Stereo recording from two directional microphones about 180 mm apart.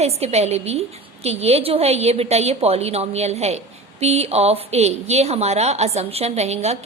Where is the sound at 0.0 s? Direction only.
35° right (ahead or behind).